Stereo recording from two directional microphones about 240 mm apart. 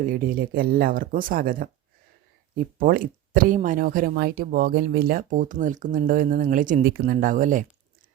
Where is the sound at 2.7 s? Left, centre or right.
Right.